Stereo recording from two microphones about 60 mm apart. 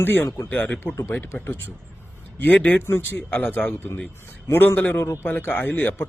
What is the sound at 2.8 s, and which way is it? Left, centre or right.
Speech, left.